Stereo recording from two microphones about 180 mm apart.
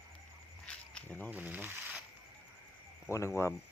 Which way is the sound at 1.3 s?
10° right (ahead or behind).